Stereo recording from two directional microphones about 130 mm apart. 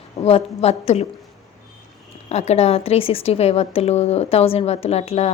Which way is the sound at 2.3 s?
55° left (ahead or behind).